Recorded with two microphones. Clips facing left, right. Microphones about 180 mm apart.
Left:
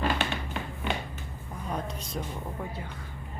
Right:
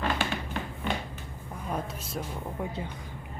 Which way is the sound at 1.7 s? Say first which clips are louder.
Even; 5° right (ahead or behind).